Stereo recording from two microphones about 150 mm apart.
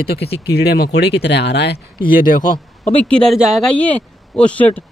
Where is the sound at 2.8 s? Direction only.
10° left (ahead or behind).